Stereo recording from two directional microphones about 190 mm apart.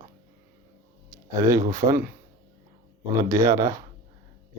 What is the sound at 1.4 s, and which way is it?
Speech, 15° right (ahead or behind).